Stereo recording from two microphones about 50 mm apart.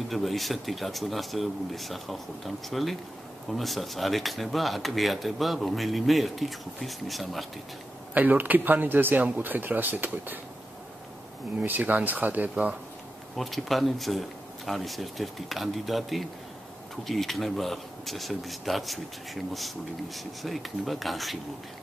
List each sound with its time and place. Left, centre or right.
0.1 s speech: centre
8.1 s speech: right
11.6 s speech: right
13.4 s speech: centre